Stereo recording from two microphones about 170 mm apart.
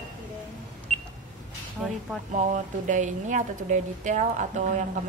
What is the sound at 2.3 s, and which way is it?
A woman's voice, 50° right (ahead or behind).